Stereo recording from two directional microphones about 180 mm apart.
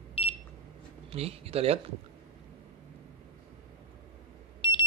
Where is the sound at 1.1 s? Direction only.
35° right (ahead or behind).